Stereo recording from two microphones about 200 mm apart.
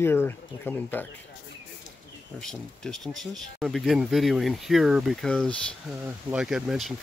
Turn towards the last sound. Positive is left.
turn(degrees=0)  # may be behind; listen again after turning